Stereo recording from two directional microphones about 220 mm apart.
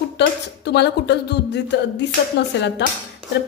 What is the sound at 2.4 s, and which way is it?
Speech, 50° left (ahead or behind).